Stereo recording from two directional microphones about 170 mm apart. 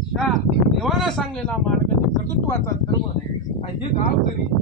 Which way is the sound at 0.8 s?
Centre (ahead or behind).